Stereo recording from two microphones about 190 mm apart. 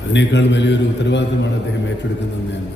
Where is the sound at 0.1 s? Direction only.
65° left (ahead or behind).